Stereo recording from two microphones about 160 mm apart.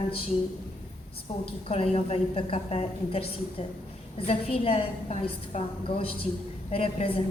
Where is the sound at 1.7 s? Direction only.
35° left (ahead or behind).